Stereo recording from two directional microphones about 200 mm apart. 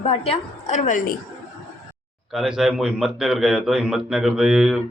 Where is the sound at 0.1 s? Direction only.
35° left (ahead or behind).